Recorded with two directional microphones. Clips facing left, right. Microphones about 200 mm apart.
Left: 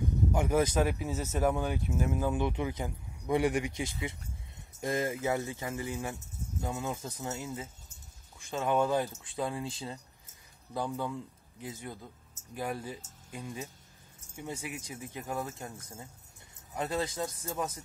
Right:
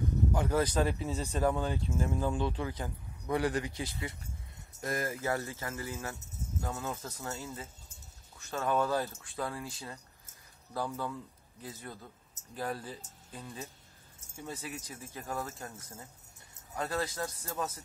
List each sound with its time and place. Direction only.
0.3 s speech: 20° left (ahead or behind)